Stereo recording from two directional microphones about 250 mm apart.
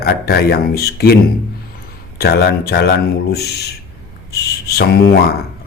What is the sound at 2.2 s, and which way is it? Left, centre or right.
Speech, left.